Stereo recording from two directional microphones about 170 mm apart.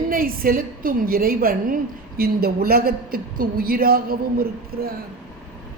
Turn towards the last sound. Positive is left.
turn(degrees=-65)  # may be behind; listen again after turning